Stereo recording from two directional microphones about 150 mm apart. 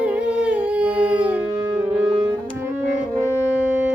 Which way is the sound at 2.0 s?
30° right (ahead or behind).